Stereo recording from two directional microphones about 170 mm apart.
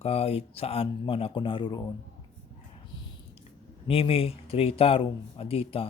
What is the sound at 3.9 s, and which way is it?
Speech, 35° left (ahead or behind).